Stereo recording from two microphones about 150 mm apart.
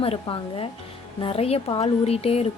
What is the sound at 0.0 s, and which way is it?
Speech, 40° left (ahead or behind).